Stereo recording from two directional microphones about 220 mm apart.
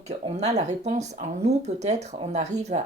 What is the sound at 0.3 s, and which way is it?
Speech, 30° right (ahead or behind).